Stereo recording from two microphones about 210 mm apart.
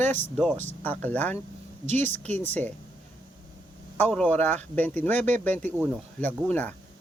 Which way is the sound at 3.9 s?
5° left (ahead or behind).